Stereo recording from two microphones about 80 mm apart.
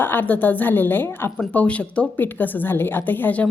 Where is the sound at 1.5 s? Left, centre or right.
Centre.